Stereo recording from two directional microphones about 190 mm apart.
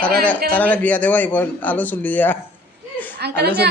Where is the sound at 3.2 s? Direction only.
60° right (ahead or behind).